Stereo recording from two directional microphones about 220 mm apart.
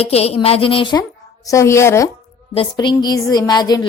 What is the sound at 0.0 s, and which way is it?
A woman's voice, 25° left (ahead or behind).